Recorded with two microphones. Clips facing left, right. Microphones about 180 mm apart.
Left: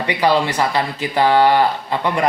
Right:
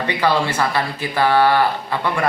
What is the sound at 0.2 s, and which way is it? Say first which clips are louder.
Speech: left 2 dB; 15° left (ahead or behind).